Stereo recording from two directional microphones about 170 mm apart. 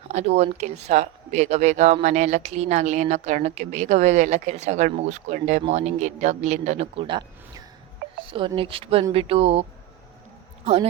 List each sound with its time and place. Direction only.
0.1 s speech: 40° right (ahead or behind)